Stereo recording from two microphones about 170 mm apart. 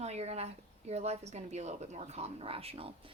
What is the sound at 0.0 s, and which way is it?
A woman's voice, 40° right (ahead or behind).